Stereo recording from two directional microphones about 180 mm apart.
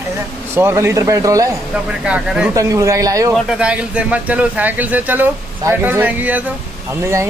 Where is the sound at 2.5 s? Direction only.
20° right (ahead or behind).